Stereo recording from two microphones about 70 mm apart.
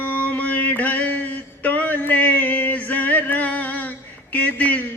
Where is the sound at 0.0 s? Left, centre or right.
Left.